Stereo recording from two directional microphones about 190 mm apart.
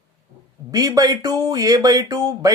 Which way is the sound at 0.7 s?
20° right (ahead or behind).